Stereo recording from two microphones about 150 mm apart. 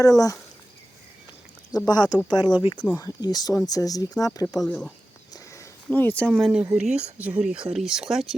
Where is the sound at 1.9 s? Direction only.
25° left (ahead or behind).